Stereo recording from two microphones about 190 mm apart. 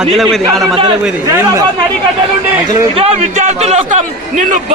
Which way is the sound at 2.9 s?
35° right (ahead or behind).